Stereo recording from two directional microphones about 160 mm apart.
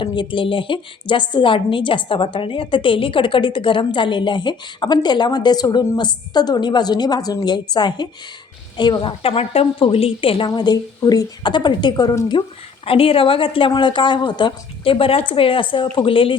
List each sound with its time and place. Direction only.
0.0 s a woman's voice: 30° left (ahead or behind)